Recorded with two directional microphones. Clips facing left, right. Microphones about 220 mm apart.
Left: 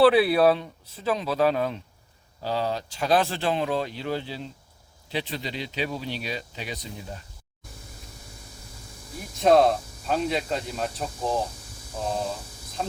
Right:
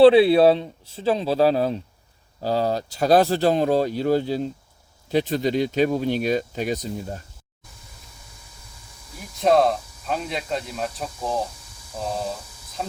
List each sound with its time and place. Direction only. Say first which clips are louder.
0.0 s speech: right 5 dB; 25° right (ahead or behind); by 7.2 s 45° right (ahead or behind)
9.4 s speech: even; centre (ahead or behind)